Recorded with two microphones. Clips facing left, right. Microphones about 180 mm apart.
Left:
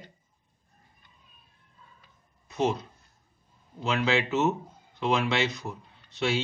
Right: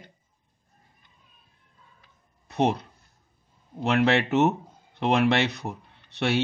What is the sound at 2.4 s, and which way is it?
A man's voice, 65° right (ahead or behind).